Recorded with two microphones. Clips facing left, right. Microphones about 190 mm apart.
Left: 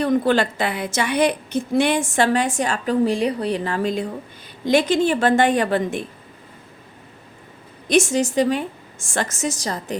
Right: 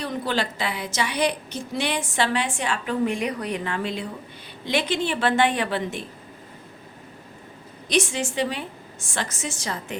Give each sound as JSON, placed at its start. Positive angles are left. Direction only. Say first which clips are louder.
{"t": 0.0, "sound": "a woman's voice", "louder": "left 9 dB", "side_deg": 50}
{"t": 7.9, "sound": "a woman's voice", "louder": "left 6 dB", "side_deg": 45}